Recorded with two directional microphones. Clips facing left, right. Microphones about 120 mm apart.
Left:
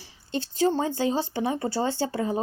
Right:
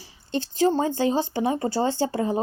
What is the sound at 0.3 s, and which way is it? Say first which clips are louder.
A woman's voice: right 2 dB; 40° right (ahead or behind).